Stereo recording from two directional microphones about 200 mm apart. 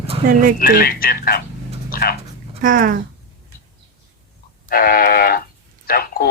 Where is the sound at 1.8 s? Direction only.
45° left (ahead or behind).